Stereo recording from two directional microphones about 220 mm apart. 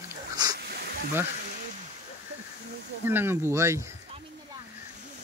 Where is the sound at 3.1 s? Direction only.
10° right (ahead or behind).